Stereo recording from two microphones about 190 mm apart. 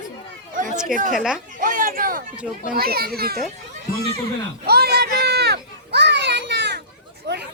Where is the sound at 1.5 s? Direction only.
45° right (ahead or behind).